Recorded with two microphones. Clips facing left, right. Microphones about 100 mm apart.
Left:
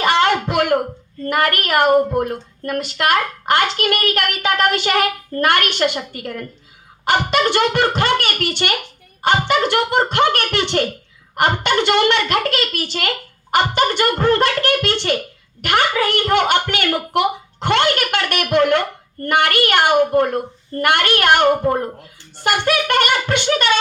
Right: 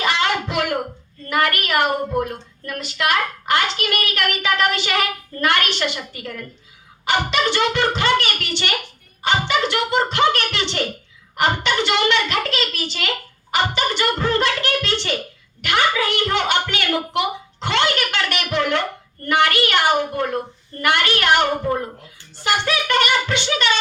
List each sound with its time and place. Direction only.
0.0 s music: 45° left (ahead or behind)
1.3 s a woman's voice: 45° left (ahead or behind)